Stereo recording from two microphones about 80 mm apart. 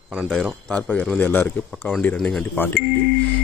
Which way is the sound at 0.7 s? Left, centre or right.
Centre.